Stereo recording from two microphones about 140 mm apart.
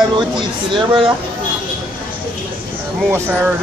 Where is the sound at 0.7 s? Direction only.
35° right (ahead or behind).